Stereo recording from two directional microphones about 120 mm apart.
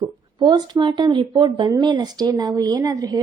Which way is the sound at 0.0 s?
35° right (ahead or behind).